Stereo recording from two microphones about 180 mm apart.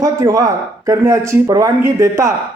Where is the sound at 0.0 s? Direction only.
20° right (ahead or behind).